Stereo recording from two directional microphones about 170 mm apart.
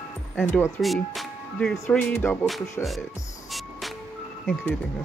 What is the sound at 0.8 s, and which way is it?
Speech, centre (ahead or behind).